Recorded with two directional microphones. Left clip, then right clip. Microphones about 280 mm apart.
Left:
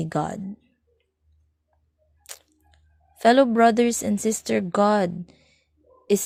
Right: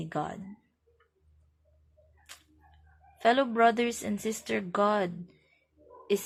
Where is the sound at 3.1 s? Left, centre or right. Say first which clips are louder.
Left 8 dB; left.